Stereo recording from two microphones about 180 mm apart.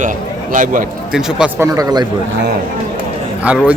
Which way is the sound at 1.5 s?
15° right (ahead or behind).